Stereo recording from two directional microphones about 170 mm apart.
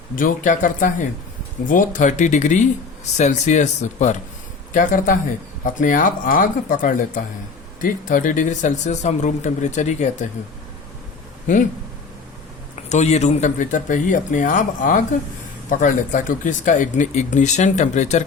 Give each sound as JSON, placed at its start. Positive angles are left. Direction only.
{"t": 0.2, "sound": "speech", "side_deg": 50}
{"t": 12.9, "sound": "speech", "side_deg": 40}